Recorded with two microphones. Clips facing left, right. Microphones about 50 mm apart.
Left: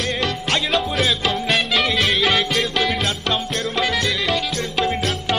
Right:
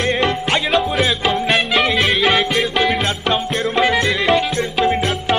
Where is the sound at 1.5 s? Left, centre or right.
Centre.